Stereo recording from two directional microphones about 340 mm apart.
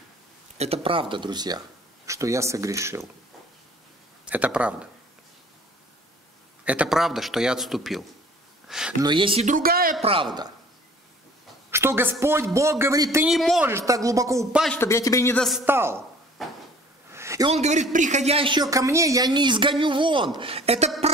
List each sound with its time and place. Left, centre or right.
0.6 s a man's voice: centre
4.3 s a man's voice: centre
6.6 s a man's voice: centre
9.0 s speech: centre
11.7 s a man's voice: centre